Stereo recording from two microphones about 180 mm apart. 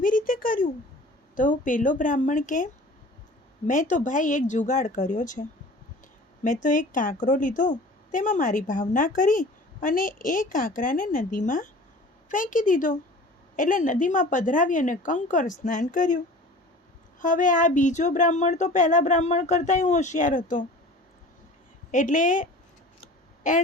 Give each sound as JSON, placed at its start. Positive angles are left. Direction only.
{"t": 0.0, "sound": "a sound", "side_deg": 50}
{"t": 1.4, "sound": "a woman's voice", "side_deg": 45}
{"t": 3.7, "sound": "a woman's voice", "side_deg": 45}
{"t": 21.9, "sound": "a woman's voice", "side_deg": 45}
{"t": 23.4, "sound": "a woman's voice", "side_deg": 45}